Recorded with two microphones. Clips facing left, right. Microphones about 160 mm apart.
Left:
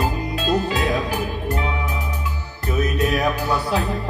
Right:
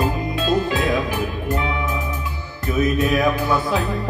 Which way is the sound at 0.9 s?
40° left (ahead or behind).